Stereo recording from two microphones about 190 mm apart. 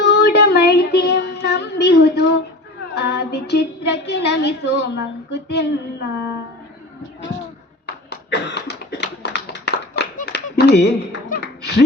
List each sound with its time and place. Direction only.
0.0 s child singing: 60° left (ahead or behind)
2.9 s speech: 60° left (ahead or behind)
8.3 s a sound: 65° left (ahead or behind)